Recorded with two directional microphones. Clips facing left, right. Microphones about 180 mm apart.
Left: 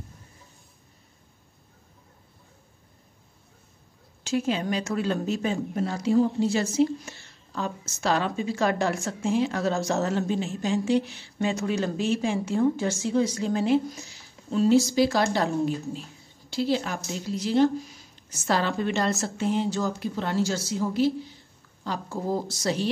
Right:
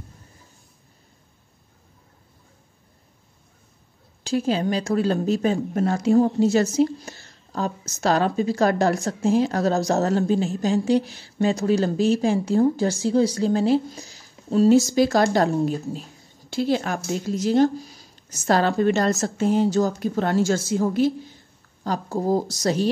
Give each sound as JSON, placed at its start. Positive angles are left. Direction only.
{"t": 4.2, "sound": "speech", "side_deg": -35}